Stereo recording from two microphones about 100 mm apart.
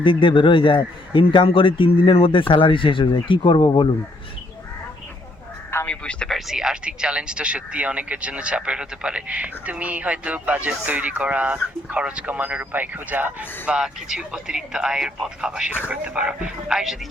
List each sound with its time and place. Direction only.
0.0 s a man's voice: 55° left (ahead or behind)
5.7 s speech: 15° left (ahead or behind); by 17.0 s 5° right (ahead or behind)